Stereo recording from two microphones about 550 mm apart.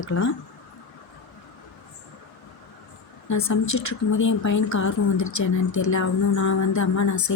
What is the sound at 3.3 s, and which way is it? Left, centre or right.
A woman's voice, left.